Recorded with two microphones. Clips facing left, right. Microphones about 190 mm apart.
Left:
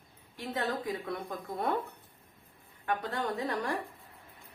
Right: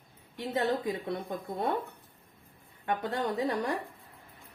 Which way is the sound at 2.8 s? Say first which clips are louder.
Right 2 dB; 25° right (ahead or behind).